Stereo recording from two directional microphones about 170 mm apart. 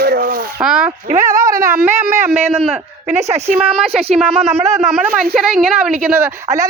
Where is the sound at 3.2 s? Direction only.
40° right (ahead or behind).